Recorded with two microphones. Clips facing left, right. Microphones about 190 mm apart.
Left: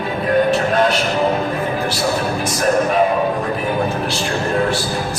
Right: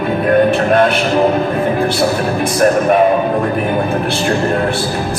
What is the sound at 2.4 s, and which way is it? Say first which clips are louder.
Music: right 6 dB; 60° right (ahead or behind).